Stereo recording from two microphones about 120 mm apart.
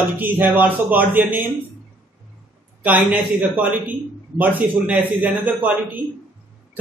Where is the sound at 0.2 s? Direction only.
15° right (ahead or behind).